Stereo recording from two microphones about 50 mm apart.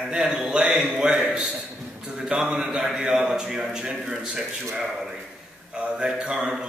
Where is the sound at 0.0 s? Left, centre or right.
Centre.